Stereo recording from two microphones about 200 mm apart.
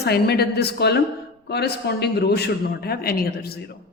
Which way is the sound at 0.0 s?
55° left (ahead or behind).